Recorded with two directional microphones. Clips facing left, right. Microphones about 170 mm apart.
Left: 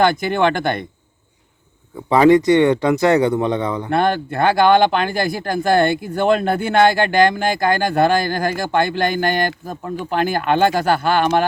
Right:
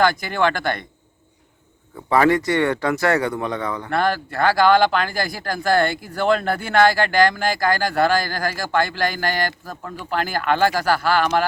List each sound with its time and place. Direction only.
0.0 s speech: 20° left (ahead or behind)
2.0 s speech: 20° left (ahead or behind)